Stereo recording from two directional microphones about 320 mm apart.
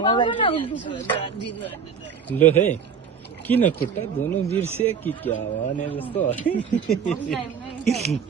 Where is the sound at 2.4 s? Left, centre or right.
Centre.